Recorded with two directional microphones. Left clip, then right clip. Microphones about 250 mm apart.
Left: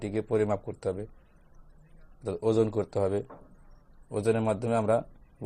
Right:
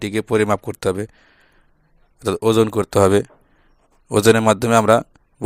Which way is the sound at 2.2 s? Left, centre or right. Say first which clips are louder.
Right 10 dB; right.